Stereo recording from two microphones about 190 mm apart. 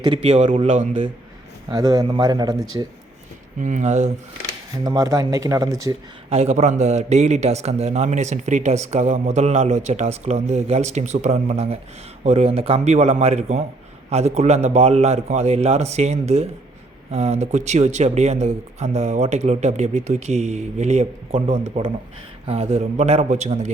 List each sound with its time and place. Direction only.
0.0 s a man's voice: 30° right (ahead or behind)
1.7 s a man's voice: 20° right (ahead or behind)
3.6 s a man's voice: 40° right (ahead or behind)
4.8 s speech: 20° right (ahead or behind)
6.3 s a man's voice: 35° right (ahead or behind)